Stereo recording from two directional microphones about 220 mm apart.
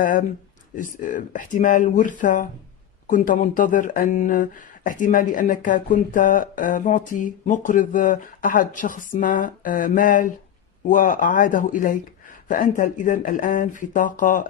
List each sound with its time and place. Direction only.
0.0 s speech: 40° left (ahead or behind)